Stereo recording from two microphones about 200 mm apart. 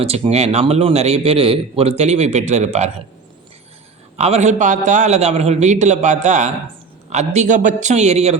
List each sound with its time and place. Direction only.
0.0 s a man's voice: 30° right (ahead or behind)
4.2 s a man's voice: 35° right (ahead or behind)